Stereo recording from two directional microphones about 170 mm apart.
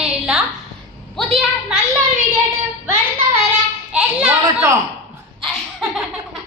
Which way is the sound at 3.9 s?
5° right (ahead or behind).